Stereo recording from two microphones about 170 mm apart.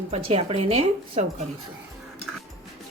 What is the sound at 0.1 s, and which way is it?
Speech, 40° right (ahead or behind).